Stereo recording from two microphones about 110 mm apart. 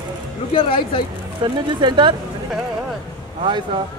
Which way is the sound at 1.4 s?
45° right (ahead or behind).